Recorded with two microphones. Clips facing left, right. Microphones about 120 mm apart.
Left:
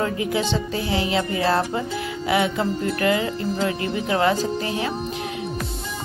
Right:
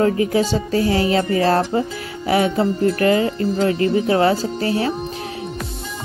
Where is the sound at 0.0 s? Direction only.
40° right (ahead or behind).